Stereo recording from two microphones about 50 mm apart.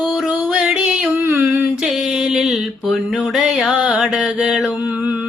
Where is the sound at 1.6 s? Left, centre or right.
Centre.